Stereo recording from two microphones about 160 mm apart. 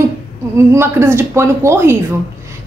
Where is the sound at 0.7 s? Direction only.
15° right (ahead or behind).